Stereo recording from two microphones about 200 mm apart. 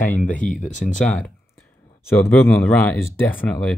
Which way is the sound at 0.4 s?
40° left (ahead or behind).